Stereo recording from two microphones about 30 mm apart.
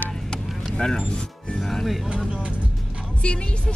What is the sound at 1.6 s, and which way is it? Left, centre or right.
Speech, centre.